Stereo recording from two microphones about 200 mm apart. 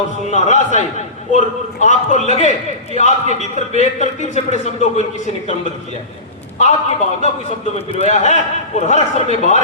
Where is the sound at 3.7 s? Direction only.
35° left (ahead or behind).